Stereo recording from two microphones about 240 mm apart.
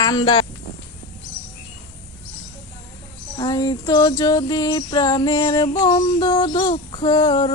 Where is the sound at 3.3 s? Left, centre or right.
Centre.